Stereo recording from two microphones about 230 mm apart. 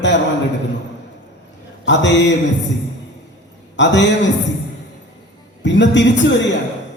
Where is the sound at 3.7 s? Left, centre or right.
Left.